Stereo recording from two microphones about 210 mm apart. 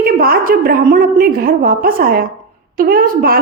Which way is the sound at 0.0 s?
45° right (ahead or behind).